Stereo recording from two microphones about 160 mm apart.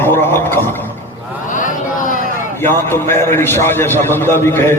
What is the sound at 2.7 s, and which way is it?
A man's voice, 15° left (ahead or behind).